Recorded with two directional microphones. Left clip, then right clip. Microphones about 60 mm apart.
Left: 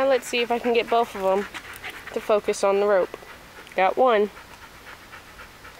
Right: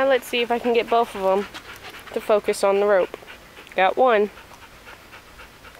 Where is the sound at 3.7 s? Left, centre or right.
Centre.